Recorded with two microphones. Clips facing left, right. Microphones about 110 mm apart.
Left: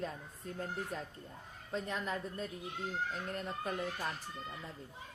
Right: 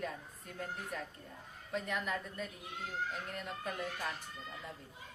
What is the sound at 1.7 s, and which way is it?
Speech, 30° left (ahead or behind).